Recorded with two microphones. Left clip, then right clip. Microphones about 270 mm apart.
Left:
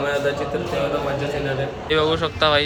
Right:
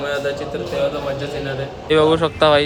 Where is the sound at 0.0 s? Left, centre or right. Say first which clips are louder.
Even; centre.